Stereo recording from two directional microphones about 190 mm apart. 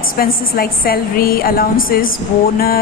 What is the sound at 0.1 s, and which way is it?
A woman's voice, 50° left (ahead or behind).